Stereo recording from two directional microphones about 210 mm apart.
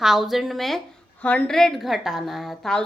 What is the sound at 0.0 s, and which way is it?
A woman's voice, centre (ahead or behind).